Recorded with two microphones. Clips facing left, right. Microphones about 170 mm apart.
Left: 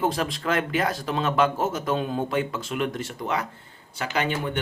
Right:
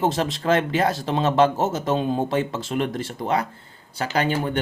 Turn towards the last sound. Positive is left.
turn(degrees=-35)  # may be behind; listen again after turning